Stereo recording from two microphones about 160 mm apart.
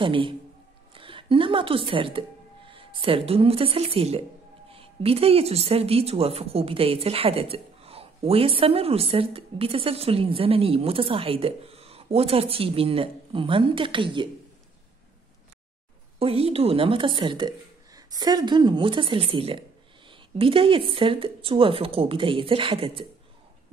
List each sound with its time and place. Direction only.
0.0 s a woman's voice: 30° right (ahead or behind)
16.2 s a woman's voice: 40° right (ahead or behind)